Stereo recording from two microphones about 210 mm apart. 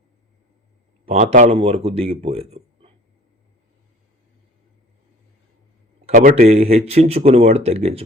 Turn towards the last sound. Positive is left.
turn(degrees=-30)  # may be behind; listen again after turning